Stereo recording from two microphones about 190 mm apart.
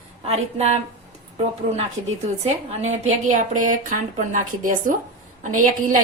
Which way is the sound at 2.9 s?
40° right (ahead or behind).